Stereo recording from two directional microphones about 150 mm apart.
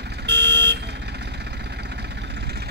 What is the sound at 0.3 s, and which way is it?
Vehicle, 90° right.